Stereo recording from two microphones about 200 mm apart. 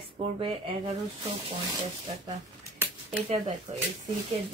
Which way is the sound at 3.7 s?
30° right (ahead or behind).